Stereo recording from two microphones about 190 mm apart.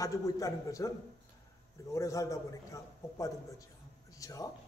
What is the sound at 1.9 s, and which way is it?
A man's voice, 15° left (ahead or behind).